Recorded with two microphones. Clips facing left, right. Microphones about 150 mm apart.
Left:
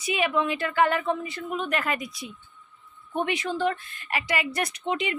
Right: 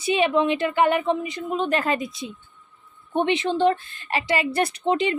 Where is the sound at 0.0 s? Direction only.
25° right (ahead or behind).